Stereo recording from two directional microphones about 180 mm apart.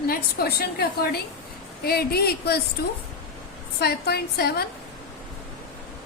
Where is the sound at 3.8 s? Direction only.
60° left (ahead or behind).